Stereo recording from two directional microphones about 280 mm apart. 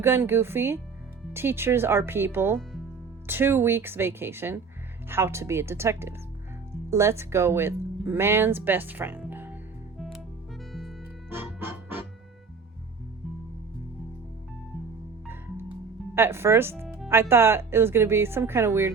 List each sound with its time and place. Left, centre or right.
0.0 s speech: centre
10.7 s music: centre
16.1 s speech: centre